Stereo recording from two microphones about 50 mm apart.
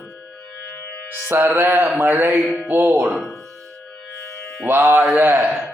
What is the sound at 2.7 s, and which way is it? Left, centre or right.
Music, right.